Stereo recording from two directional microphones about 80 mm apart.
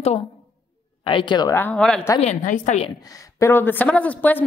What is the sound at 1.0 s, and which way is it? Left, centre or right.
Speech, left.